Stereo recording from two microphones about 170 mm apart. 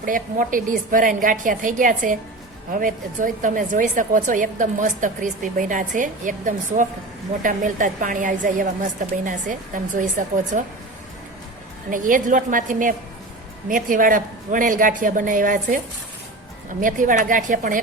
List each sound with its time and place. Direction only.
0.0 s a woman's voice: 55° right (ahead or behind)
11.9 s a woman's voice: 50° right (ahead or behind)
16.8 s a woman's voice: 50° right (ahead or behind)